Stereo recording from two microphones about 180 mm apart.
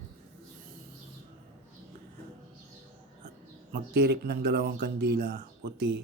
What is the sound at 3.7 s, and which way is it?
Speech, 65° right (ahead or behind).